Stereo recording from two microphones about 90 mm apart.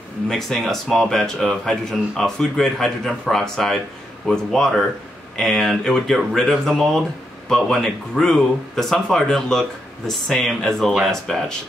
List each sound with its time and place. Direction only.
0.3 s speech: 5° left (ahead or behind)